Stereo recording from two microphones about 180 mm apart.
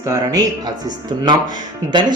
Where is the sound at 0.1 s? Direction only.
20° right (ahead or behind).